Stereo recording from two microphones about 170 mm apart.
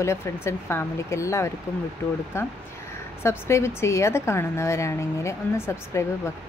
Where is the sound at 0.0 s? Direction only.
15° left (ahead or behind).